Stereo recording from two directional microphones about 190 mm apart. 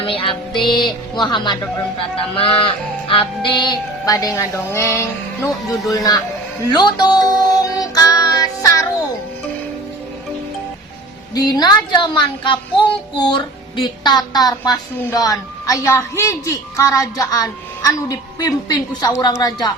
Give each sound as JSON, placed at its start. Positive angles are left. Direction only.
{"t": 0.0, "sound": "music", "side_deg": 30}
{"t": 0.6, "sound": "speech", "side_deg": 25}
{"t": 6.7, "sound": "music", "side_deg": 20}
{"t": 11.3, "sound": "speech", "side_deg": 20}